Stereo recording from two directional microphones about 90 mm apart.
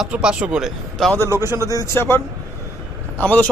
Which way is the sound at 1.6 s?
40° left (ahead or behind).